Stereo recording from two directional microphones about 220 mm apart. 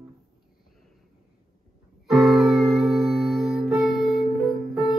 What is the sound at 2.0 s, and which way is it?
Music, centre (ahead or behind).